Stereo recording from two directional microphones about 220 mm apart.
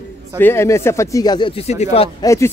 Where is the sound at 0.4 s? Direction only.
10° left (ahead or behind); by 2.0 s 30° left (ahead or behind).